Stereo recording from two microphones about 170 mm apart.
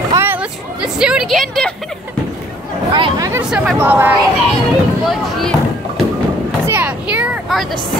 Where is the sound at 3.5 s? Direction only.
Centre (ahead or behind).